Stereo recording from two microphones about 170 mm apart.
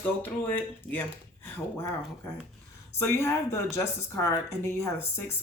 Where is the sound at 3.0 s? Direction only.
15° left (ahead or behind).